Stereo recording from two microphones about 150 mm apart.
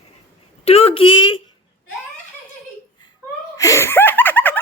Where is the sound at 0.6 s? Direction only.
45° left (ahead or behind).